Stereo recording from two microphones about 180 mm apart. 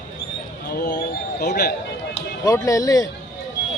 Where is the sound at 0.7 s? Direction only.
60° left (ahead or behind).